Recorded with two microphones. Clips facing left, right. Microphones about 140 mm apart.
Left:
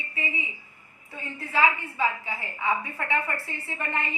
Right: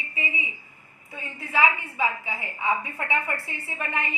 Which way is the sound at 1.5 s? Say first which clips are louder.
Right 1 dB; 15° right (ahead or behind).